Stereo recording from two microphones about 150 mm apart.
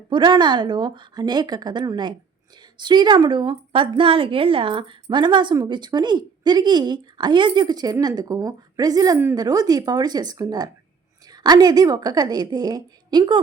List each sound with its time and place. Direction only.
0.1 s speech: 30° right (ahead or behind)